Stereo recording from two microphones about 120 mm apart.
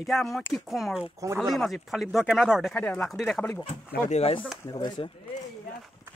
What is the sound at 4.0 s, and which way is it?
Speech, 60° left (ahead or behind).